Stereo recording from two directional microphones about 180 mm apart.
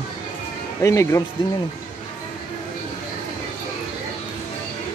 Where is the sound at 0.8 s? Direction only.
15° left (ahead or behind).